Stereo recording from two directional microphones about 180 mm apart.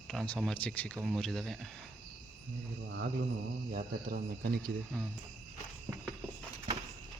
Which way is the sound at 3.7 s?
55° right (ahead or behind).